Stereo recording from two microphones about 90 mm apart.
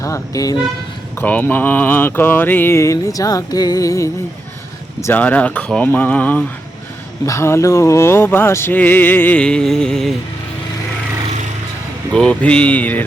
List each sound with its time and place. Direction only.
0.0 s speech: 40° left (ahead or behind)
1.2 s mantra: 20° left (ahead or behind); by 4.1 s 35° left (ahead or behind)
4.9 s speech: 30° left (ahead or behind)
5.2 s mantra: 15° left (ahead or behind)
7.3 s mantra: 30° left (ahead or behind); by 10.2 s 5° left (ahead or behind)
12.1 s mantra: 10° left (ahead or behind)